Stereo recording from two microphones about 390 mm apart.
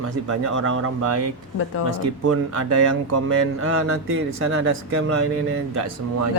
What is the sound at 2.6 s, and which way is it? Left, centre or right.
Speech, right.